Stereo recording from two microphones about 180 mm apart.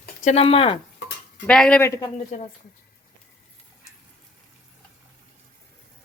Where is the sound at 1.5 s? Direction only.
5° left (ahead or behind).